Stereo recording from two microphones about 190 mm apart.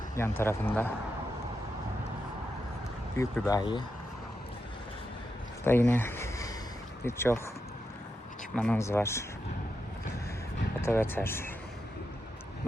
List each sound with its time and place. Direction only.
0.2 s speech: 10° left (ahead or behind)
3.2 s speech: 15° left (ahead or behind)
5.6 s a sound: 10° left (ahead or behind)
7.0 s speech: 15° left (ahead or behind)
8.5 s speech: 5° left (ahead or behind)
10.8 s speech: 10° left (ahead or behind)